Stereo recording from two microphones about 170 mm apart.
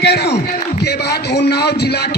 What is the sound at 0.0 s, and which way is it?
A man's voice, 75° left (ahead or behind).